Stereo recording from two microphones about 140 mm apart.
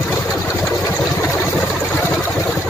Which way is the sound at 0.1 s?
15° left (ahead or behind).